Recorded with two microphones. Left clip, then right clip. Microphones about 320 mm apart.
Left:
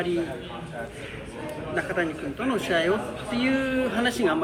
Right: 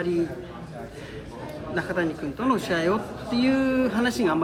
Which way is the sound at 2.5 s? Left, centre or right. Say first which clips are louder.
Even; right.